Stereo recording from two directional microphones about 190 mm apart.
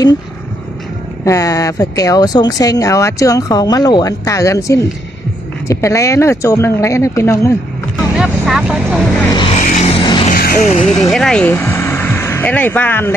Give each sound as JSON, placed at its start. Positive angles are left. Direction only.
{"t": 1.2, "sound": "speech", "side_deg": 15}
{"t": 8.2, "sound": "speech", "side_deg": 0}
{"t": 9.3, "sound": "vehicle", "side_deg": 25}
{"t": 9.6, "sound": "vehicle", "side_deg": 40}
{"t": 10.3, "sound": "music", "side_deg": 50}
{"t": 11.1, "sound": "speech", "side_deg": 5}